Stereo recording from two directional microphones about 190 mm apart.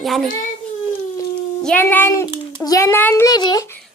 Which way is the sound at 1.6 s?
10° left (ahead or behind).